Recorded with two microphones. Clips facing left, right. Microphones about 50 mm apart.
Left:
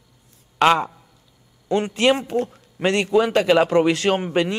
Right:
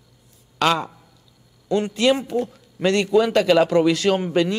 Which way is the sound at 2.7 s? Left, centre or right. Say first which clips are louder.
Right 1 dB; left.